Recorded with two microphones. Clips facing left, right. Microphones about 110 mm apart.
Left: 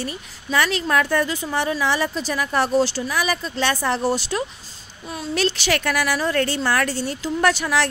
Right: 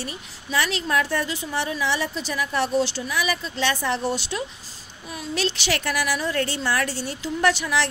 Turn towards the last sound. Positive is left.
turn(degrees=50)  # may be behind; listen again after turning